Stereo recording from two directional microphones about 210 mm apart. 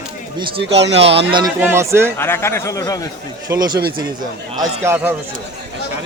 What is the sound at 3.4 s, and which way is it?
A man's voice, 20° right (ahead or behind).